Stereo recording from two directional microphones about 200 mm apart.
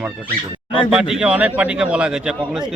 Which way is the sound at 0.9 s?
5° right (ahead or behind).